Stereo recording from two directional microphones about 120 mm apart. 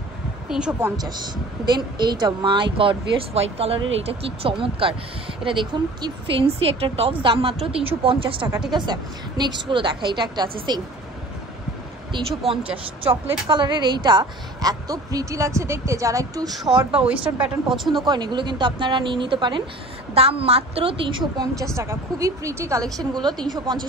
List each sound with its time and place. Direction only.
0.5 s a woman's voice: 5° right (ahead or behind)
0.9 s speech: 35° right (ahead or behind)
8.7 s a woman's voice: 35° right (ahead or behind)
12.7 s a woman's voice: 45° right (ahead or behind); by 16.5 s 30° right (ahead or behind)
16.5 s a woman's voice: 5° right (ahead or behind)
18.0 s a woman's voice: 40° right (ahead or behind)
20.2 s speech: 55° right (ahead or behind); by 21.6 s 35° right (ahead or behind)
21.7 s a woman's voice: 25° right (ahead or behind)